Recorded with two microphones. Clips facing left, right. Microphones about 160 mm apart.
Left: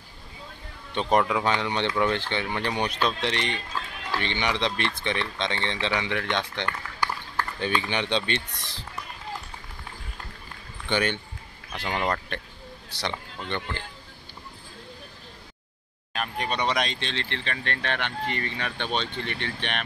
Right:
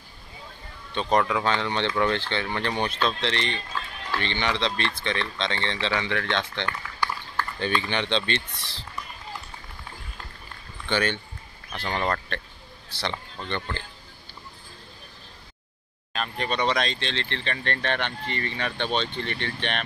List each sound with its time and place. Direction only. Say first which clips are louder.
1.1 s speech: even; 15° left (ahead or behind)
10.9 s speech: even; 15° left (ahead or behind)
16.1 s speech: right 1 dB; 10° left (ahead or behind)